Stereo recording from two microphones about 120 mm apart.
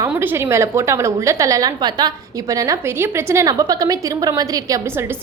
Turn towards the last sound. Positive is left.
turn(degrees=-30)  # may be behind; listen again after turning